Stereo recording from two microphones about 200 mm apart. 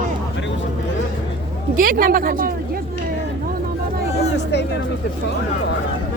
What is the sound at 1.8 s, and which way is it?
Speech, 45° right (ahead or behind).